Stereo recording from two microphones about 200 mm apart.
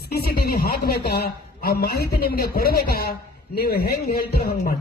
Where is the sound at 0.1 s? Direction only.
50° left (ahead or behind).